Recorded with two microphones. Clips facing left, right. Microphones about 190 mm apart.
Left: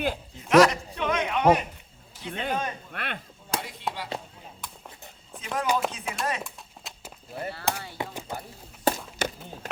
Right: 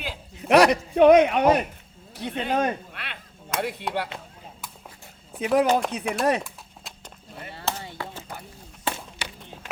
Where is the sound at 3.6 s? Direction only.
65° right (ahead or behind).